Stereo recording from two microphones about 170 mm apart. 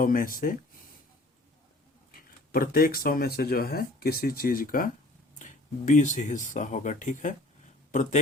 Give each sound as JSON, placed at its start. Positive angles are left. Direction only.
{"t": 0.0, "sound": "speech", "side_deg": 55}
{"t": 2.1, "sound": "speech", "side_deg": 60}